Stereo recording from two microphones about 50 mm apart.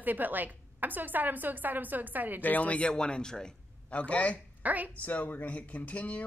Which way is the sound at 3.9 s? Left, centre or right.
Left.